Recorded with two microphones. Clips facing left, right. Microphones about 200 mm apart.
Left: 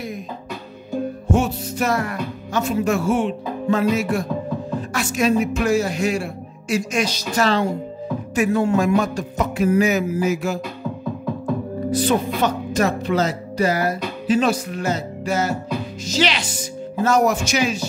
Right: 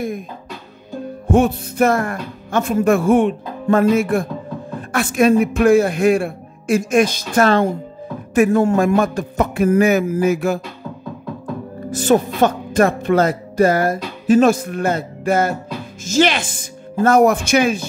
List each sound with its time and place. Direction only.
1.2 s a woman's voice: 55° right (ahead or behind)
11.9 s speech: 45° right (ahead or behind)